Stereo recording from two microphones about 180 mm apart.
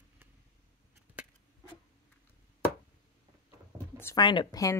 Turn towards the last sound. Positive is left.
turn(degrees=20)  # may be behind; listen again after turning